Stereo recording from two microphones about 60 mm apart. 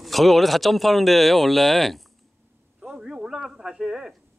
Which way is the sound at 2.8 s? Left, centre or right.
Centre.